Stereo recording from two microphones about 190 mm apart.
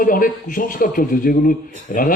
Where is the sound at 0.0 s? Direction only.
45° left (ahead or behind).